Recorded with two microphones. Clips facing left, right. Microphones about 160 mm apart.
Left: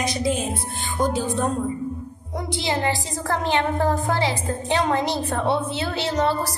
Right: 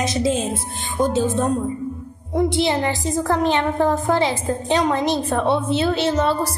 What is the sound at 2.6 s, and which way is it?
A woman's voice, 20° right (ahead or behind).